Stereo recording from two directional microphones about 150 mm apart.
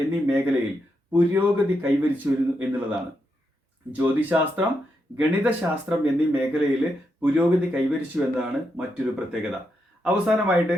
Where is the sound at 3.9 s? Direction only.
10° right (ahead or behind).